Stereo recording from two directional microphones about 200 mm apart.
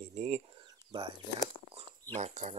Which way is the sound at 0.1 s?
35° right (ahead or behind).